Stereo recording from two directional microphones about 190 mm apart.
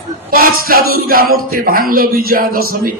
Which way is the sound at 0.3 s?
50° right (ahead or behind).